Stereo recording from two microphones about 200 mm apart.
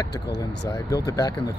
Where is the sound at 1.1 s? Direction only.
20° left (ahead or behind).